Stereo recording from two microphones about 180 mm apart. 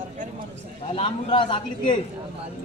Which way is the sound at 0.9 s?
30° left (ahead or behind).